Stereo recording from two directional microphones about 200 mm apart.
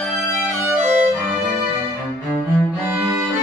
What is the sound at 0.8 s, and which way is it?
Violin, 35° right (ahead or behind).